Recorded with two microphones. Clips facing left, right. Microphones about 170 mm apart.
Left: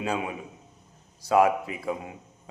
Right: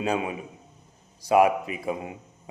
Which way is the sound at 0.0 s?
20° right (ahead or behind).